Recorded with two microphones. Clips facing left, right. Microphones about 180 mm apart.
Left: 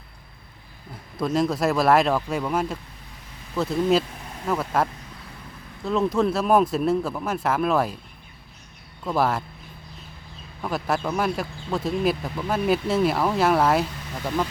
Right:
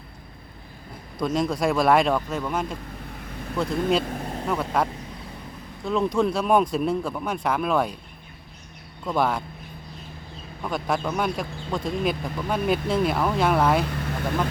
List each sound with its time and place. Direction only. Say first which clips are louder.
1.2 s speech: left 1 dB; centre (ahead or behind)
4.0 s vehicle: right 9 dB; 50° right (ahead or behind)
4.4 s speech: left 1 dB; 5° left (ahead or behind)
9.0 s speech: left 1 dB; 5° left (ahead or behind)
10.6 s speech: left 1 dB; 5° left (ahead or behind)
13.8 s vehicle: right 6 dB; 65° right (ahead or behind)